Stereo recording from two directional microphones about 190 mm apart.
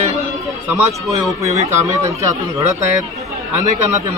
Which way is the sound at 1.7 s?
15° right (ahead or behind).